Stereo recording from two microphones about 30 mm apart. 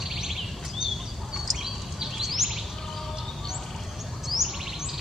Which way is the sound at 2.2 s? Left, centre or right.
Centre.